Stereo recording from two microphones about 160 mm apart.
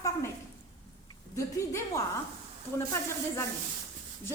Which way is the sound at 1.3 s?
20° left (ahead or behind).